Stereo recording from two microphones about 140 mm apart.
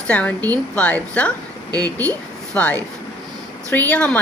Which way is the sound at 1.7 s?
30° right (ahead or behind).